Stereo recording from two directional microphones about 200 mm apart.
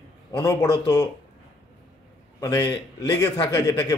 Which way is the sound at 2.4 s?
20° left (ahead or behind).